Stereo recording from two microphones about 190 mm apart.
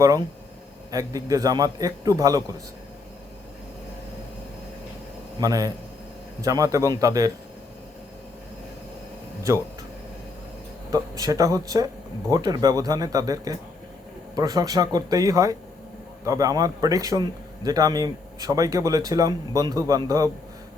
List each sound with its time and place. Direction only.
0.9 s a man's voice: 20° right (ahead or behind)
5.4 s a man's voice: 20° right (ahead or behind)
10.9 s a man's voice: 20° right (ahead or behind)